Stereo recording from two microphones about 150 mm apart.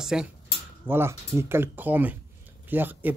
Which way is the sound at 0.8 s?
15° right (ahead or behind).